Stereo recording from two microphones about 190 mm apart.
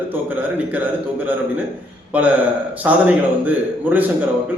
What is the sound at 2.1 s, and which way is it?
A man's voice, 10° right (ahead or behind).